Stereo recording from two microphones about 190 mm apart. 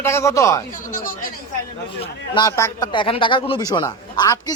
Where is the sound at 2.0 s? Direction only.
20° left (ahead or behind).